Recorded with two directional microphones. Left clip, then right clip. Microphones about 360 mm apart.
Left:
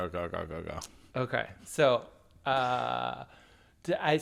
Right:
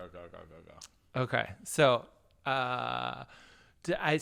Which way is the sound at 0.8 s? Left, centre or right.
Centre.